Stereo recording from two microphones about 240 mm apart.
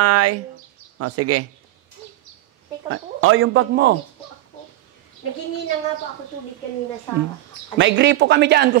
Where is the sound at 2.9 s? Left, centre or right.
Right.